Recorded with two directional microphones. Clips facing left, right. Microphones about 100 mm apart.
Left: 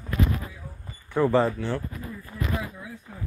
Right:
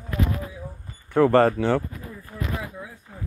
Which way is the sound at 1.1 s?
75° right (ahead or behind).